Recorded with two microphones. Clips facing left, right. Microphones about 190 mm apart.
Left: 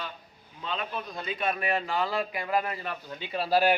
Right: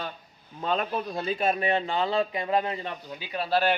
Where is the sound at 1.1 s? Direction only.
30° right (ahead or behind).